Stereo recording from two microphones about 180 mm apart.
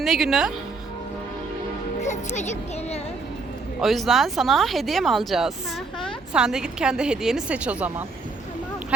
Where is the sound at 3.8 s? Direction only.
Centre (ahead or behind).